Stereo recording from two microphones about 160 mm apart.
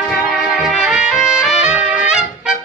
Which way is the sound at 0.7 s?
5° right (ahead or behind).